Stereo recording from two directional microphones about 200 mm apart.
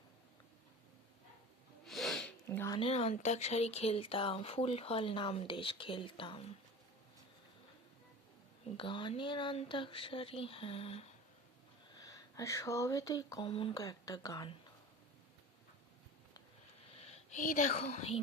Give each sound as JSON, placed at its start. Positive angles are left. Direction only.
{"t": 1.8, "sound": "speech", "side_deg": 0}
{"t": 8.8, "sound": "speech", "side_deg": 25}
{"t": 11.9, "sound": "speech", "side_deg": 15}
{"t": 16.9, "sound": "speech", "side_deg": 30}